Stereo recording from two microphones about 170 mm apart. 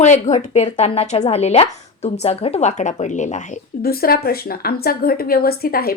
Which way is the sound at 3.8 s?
60° left (ahead or behind).